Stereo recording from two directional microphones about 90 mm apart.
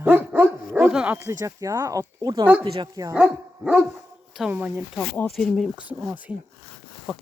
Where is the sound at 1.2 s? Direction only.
35° right (ahead or behind).